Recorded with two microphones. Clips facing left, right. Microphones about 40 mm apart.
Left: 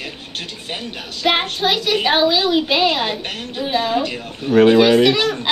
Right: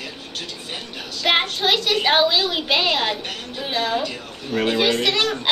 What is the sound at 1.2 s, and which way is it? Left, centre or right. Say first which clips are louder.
A child's voice: left 2 dB; centre.